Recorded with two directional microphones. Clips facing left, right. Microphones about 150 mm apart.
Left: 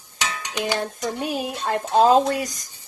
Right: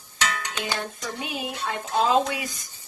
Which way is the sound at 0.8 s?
40° left (ahead or behind).